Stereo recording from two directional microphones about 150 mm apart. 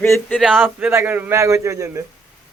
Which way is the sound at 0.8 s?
10° right (ahead or behind).